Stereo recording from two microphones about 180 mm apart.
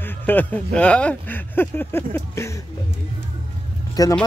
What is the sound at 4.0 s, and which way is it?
Speech, 20° left (ahead or behind).